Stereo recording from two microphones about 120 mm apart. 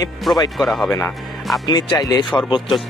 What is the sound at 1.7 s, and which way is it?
Speech, 35° left (ahead or behind).